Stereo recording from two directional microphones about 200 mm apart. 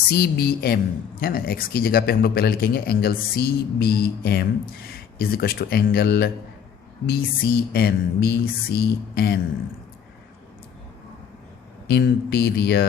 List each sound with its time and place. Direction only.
0.1 s speech: 55° left (ahead or behind)
11.9 s speech: 55° left (ahead or behind)